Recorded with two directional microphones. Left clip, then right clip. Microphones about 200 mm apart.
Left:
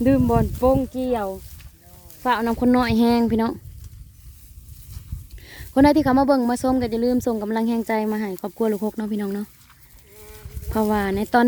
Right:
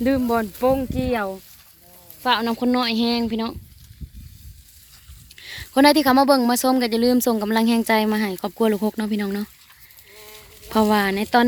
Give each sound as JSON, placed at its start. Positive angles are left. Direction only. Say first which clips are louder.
{"t": 0.0, "sound": "speech", "louder": "left 1 dB", "side_deg": 30}
{"t": 1.1, "sound": "a woman's voice", "louder": "even", "side_deg": 10}
{"t": 2.2, "sound": "a woman's voice", "louder": "even", "side_deg": 30}
{"t": 5.4, "sound": "a woman's voice", "louder": "right 1 dB", "side_deg": 25}
{"t": 10.2, "sound": "a sound", "louder": "right 1 dB", "side_deg": 55}
{"t": 10.7, "sound": "a woman's voice", "louder": "right 3 dB", "side_deg": 5}